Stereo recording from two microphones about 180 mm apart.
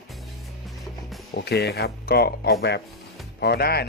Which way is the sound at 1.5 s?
65° left (ahead or behind).